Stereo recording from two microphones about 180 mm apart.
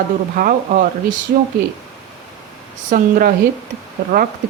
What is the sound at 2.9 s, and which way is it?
Speech, 50° right (ahead or behind).